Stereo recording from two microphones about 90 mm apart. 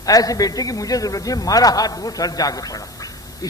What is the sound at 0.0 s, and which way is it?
A man's voice, 40° left (ahead or behind).